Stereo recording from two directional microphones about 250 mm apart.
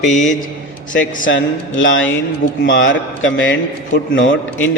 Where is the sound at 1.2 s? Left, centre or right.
Left.